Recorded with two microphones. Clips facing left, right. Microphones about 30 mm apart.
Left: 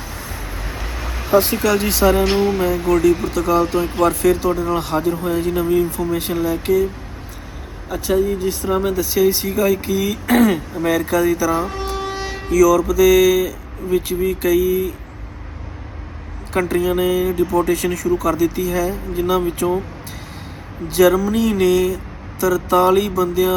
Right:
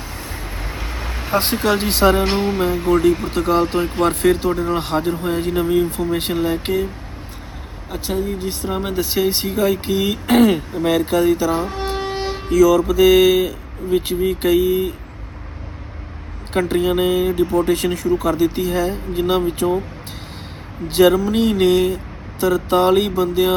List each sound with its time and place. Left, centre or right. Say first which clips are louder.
1.5 s speech: left 1 dB; right
7.9 s speech: left 5 dB; right
16.5 s speech: even; right
19.6 s speech: even; left
20.8 s speech: even; right